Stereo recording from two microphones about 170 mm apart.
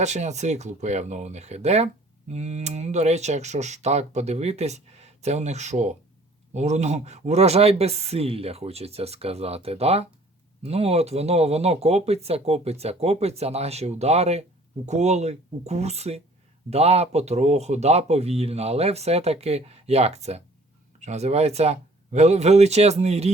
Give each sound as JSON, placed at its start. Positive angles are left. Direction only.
{"t": 0.0, "sound": "speech", "side_deg": -45}